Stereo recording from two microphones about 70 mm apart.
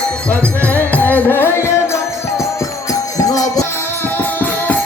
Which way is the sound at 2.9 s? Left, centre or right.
Left.